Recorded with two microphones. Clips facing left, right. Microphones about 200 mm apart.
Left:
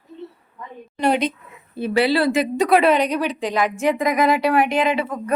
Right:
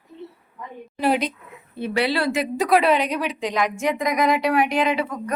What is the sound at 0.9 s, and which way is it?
A woman's voice, 5° right (ahead or behind).